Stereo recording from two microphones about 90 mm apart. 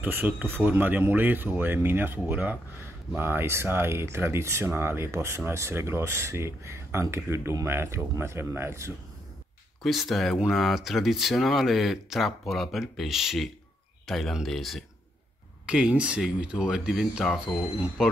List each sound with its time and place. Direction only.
0.0 s speech: 20° right (ahead or behind)
9.8 s speech: centre (ahead or behind)
15.6 s speech: 10° right (ahead or behind)
17.2 s speech: 5° left (ahead or behind)
18.0 s speech: 5° right (ahead or behind)